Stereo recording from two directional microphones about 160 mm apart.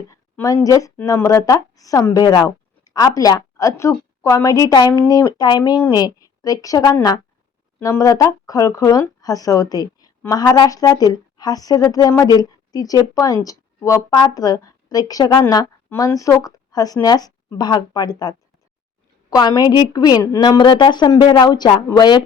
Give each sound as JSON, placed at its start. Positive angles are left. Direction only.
{"t": 0.1, "sound": "a woman's voice", "side_deg": 20}